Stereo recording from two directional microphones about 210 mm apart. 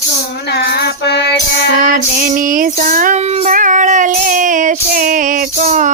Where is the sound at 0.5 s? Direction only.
50° left (ahead or behind).